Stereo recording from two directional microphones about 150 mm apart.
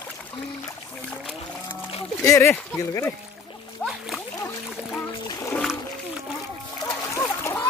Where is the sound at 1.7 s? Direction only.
40° left (ahead or behind).